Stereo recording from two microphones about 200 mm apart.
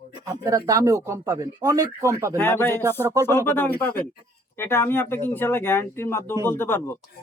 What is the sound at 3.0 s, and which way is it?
Speech, 15° right (ahead or behind).